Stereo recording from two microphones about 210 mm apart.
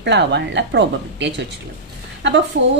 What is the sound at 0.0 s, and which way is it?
A woman's voice, 55° right (ahead or behind).